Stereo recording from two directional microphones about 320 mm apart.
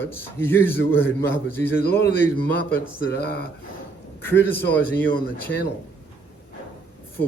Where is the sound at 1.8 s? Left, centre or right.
Left.